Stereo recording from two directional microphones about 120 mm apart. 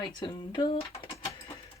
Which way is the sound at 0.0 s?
40° left (ahead or behind).